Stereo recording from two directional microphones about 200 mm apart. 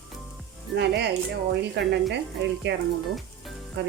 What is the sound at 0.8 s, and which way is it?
A woman's voice, 60° right (ahead or behind).